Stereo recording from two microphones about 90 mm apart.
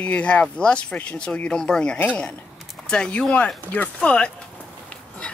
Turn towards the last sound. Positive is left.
turn(degrees=15)  # may be behind; listen again after turning